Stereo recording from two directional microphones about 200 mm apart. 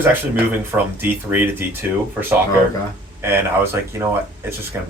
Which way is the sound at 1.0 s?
10° right (ahead or behind).